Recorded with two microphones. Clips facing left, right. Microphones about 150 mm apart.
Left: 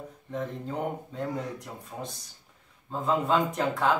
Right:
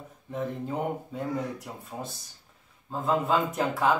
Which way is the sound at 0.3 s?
5° right (ahead or behind).